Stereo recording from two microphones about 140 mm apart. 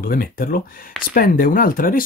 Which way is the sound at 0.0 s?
90° left.